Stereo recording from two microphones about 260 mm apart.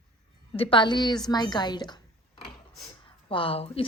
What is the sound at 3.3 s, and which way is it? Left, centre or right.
Speech, left.